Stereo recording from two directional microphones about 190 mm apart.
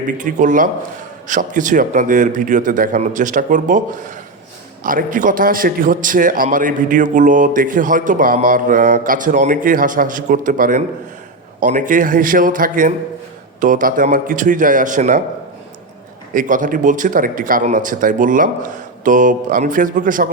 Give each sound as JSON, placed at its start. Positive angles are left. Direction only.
{"t": 0.2, "sound": "a man's voice", "side_deg": -40}
{"t": 16.3, "sound": "a man's voice", "side_deg": -45}